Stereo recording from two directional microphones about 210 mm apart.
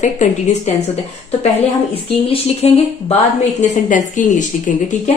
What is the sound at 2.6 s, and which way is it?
A woman's voice, 30° left (ahead or behind).